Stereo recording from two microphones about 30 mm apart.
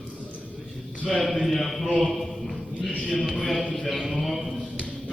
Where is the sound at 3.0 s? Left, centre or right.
Left.